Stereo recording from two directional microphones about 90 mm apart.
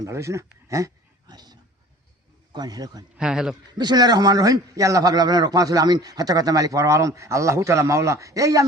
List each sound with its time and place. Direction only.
0.0 s speech: 35° right (ahead or behind)
1.3 s a sound: 50° right (ahead or behind)
2.5 s a man's voice: 50° right (ahead or behind)
3.2 s speech: 10° right (ahead or behind)
3.8 s a man's voice: 50° right (ahead or behind)